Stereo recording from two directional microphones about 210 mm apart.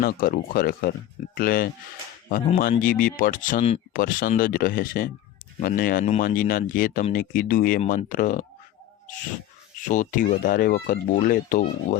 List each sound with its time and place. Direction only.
0.0 s speech: 45° left (ahead or behind)
9.8 s speech: 35° left (ahead or behind)